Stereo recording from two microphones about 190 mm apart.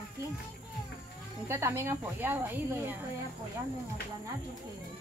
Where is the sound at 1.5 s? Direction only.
15° right (ahead or behind).